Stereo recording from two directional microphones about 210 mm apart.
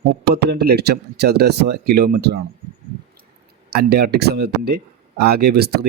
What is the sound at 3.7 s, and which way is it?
Speech, 50° right (ahead or behind).